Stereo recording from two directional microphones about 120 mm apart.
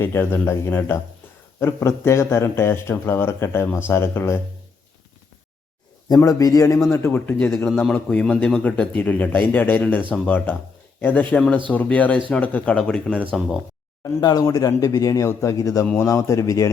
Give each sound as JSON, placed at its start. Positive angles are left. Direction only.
{"t": 0.0, "sound": "speech", "side_deg": 20}
{"t": 6.1, "sound": "speech", "side_deg": 30}
{"t": 7.3, "sound": "speech", "side_deg": 10}
{"t": 14.0, "sound": "speech", "side_deg": 30}